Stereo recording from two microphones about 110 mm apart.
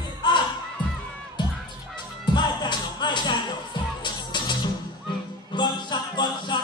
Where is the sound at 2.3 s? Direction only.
40° left (ahead or behind).